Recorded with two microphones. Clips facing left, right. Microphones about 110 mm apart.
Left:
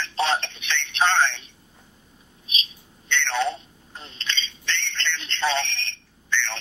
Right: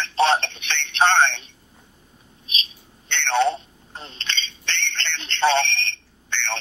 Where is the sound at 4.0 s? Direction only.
65° right (ahead or behind).